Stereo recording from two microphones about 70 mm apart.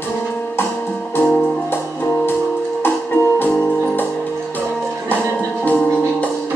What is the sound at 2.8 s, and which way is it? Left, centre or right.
Music, left.